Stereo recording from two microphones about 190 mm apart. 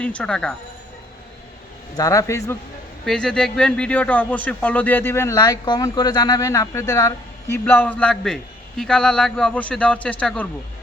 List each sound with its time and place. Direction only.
0.0 s speech: 5° left (ahead or behind)
2.0 s speech: 15° left (ahead or behind)
3.1 s speech: 5° left (ahead or behind)